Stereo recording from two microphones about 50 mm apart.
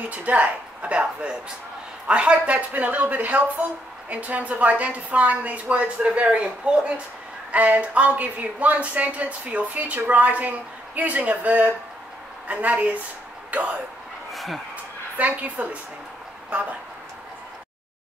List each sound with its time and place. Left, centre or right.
0.1 s a woman's voice: right
14.3 s a sound: centre
15.1 s a woman's voice: right